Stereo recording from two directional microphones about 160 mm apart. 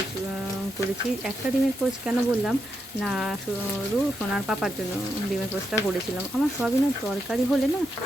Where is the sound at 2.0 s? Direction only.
5° right (ahead or behind).